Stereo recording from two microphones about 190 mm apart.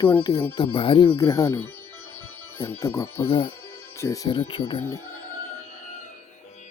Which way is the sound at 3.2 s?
30° left (ahead or behind).